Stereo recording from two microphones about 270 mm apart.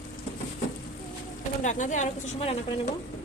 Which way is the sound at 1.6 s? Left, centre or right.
Left.